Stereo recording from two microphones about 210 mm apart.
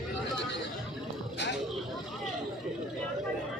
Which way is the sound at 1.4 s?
55° left (ahead or behind).